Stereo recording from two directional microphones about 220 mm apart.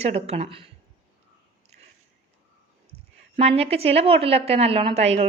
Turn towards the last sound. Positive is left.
turn(degrees=-30)  # may be behind; listen again after turning